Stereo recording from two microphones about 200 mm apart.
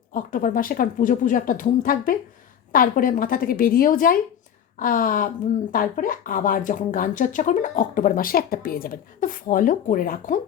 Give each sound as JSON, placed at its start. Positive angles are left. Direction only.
{"t": 0.1, "sound": "speech", "side_deg": 45}